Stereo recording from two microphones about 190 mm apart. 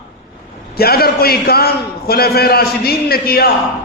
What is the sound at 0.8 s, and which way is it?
A man's voice, 55° left (ahead or behind).